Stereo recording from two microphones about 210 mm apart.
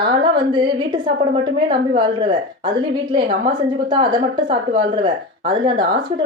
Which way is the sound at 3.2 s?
35° right (ahead or behind).